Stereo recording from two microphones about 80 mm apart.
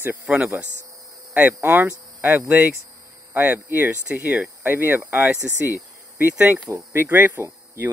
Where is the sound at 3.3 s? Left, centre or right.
Right.